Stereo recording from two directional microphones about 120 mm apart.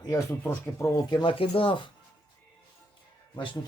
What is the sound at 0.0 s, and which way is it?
Speech, 30° left (ahead or behind).